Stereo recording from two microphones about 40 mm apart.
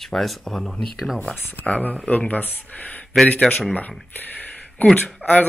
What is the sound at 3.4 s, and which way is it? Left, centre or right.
Speech, centre.